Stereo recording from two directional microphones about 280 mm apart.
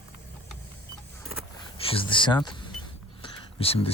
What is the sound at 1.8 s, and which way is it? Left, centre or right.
Speech, centre.